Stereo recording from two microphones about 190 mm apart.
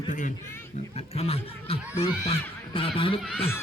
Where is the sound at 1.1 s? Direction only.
30° left (ahead or behind).